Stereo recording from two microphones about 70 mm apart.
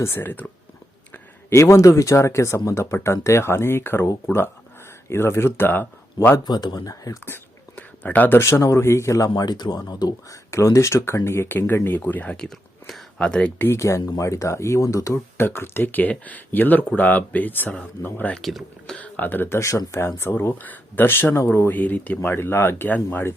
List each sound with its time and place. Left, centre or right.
0.0 s speech: left
1.5 s speech: left
6.4 s speech: left
6.8 s speech: left
7.8 s a sound: left
8.4 s speech: left
9.3 s speech: left
10.5 s speech: left; by 13.5 s centre
13.6 s speech: left
15.4 s speech: left
18.4 s speech: centre
18.9 s speech: centre; by 20.5 s left
20.5 s speech: left
21.7 s speech: left